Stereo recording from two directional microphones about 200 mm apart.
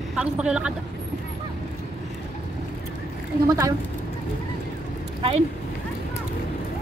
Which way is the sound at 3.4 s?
15° right (ahead or behind).